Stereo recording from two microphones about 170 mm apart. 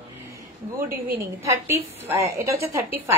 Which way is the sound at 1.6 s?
15° right (ahead or behind).